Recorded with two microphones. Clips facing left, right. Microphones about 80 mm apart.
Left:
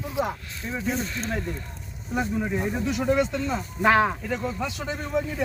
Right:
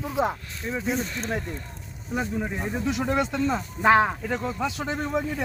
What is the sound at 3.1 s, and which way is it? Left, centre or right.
Speech, right.